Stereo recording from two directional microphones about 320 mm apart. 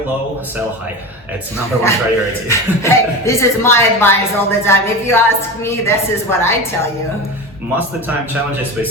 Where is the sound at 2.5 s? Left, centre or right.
Centre.